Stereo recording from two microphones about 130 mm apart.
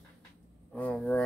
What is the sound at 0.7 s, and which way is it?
Speech, 10° left (ahead or behind).